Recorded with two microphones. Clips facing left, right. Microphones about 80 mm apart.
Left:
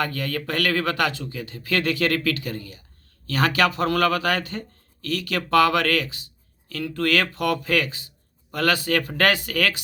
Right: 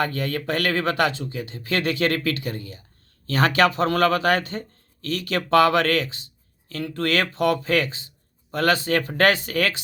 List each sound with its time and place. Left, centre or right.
0.0 s speech: right